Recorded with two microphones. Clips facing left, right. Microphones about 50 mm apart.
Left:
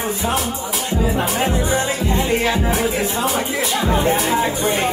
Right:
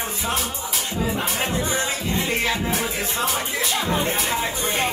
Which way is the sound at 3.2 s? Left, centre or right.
Centre.